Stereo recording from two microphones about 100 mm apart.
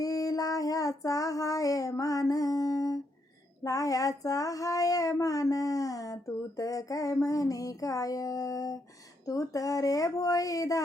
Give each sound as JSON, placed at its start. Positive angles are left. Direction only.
{"t": 0.0, "sound": "child singing", "side_deg": 40}